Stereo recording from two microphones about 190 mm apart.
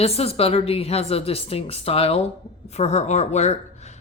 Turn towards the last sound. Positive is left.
turn(degrees=35)  # may be behind; listen again after turning